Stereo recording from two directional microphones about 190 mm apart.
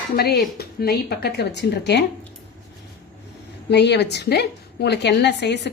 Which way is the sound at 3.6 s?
65° left (ahead or behind).